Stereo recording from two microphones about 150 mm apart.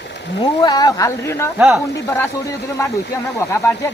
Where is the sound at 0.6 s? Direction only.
25° left (ahead or behind).